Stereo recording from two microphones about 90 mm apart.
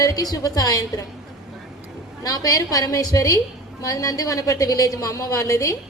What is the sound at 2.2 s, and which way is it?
A woman's voice, 45° left (ahead or behind).